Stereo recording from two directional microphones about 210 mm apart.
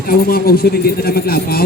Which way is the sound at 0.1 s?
45° left (ahead or behind).